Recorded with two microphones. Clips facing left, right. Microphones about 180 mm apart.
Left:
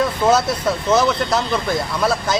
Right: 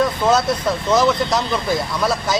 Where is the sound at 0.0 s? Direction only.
5° left (ahead or behind).